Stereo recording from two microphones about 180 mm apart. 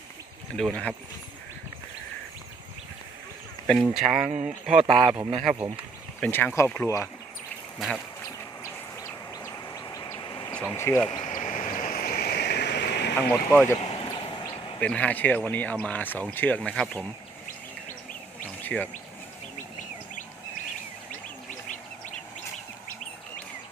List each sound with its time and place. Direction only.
0.5 s speech: 5° left (ahead or behind)
3.8 s speech: centre (ahead or behind)
6.1 s speech: 10° left (ahead or behind)
7.8 s speech: centre (ahead or behind)
8.6 s vehicle: 15° left (ahead or behind)
10.5 s speech: 15° left (ahead or behind)
11.1 s a sound: 25° left (ahead or behind)
11.3 s stream: 45° left (ahead or behind); by 13.1 s 70° left (ahead or behind)
13.1 s speech: 15° left (ahead or behind)
13.7 s a sound: 30° left (ahead or behind)
14.1 s vehicle: 30° left (ahead or behind)
14.8 s speech: 10° left (ahead or behind)
18.6 s speech: 10° left (ahead or behind)